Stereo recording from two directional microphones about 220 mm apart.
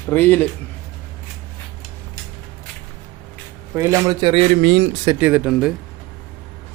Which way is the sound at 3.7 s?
10° right (ahead or behind).